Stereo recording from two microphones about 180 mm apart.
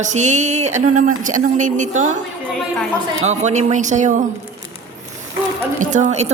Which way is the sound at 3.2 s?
40° right (ahead or behind).